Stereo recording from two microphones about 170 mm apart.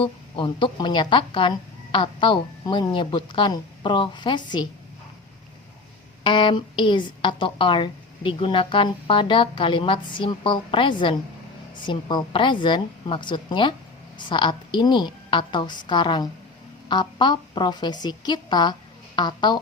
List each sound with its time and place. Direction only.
0.0 s a woman's voice: 30° left (ahead or behind)
6.2 s a woman's voice: 30° left (ahead or behind)